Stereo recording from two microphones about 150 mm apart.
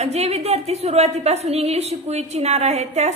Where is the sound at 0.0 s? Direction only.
45° right (ahead or behind).